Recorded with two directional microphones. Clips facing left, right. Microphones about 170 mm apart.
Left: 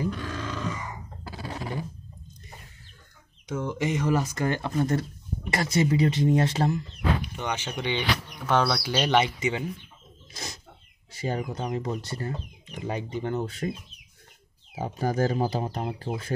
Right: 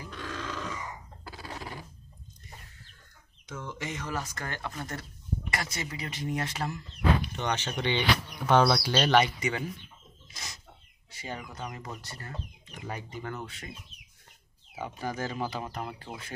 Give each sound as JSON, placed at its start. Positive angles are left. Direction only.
{"t": 0.1, "sound": "grunt", "side_deg": 5}
{"t": 1.2, "sound": "a sound", "side_deg": 15}
{"t": 3.4, "sound": "speech", "side_deg": 15}
{"t": 7.2, "sound": "speech", "side_deg": 10}
{"t": 8.5, "sound": "speech", "side_deg": 0}
{"t": 8.9, "sound": "speech", "side_deg": 15}
{"t": 11.1, "sound": "speech", "side_deg": 40}
{"t": 11.5, "sound": "speech", "side_deg": 25}
{"t": 13.5, "sound": "speech", "side_deg": 40}
{"t": 14.8, "sound": "speech", "side_deg": 40}